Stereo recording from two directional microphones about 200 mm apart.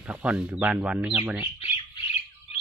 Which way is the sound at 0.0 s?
5° right (ahead or behind).